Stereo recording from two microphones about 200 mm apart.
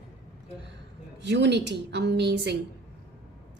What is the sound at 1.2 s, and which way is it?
A woman's voice, 60° right (ahead or behind).